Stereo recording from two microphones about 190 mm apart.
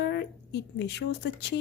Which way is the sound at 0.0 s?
60° left (ahead or behind).